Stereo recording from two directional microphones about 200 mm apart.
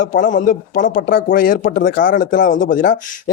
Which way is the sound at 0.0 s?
40° left (ahead or behind).